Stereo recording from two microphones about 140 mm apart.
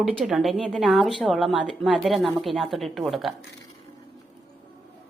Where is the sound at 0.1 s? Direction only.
Centre (ahead or behind).